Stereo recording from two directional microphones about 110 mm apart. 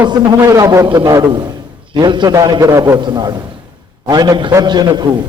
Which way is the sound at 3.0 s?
40° right (ahead or behind).